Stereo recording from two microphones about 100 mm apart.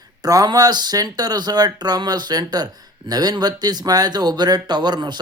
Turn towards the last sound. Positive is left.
turn(degrees=-45)  # may be behind; listen again after turning